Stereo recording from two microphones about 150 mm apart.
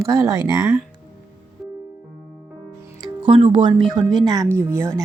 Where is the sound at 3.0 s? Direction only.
35° right (ahead or behind).